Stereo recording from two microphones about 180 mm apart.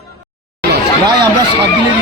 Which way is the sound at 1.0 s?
25° right (ahead or behind).